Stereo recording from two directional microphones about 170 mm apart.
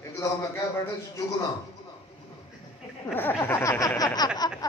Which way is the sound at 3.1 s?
10° left (ahead or behind).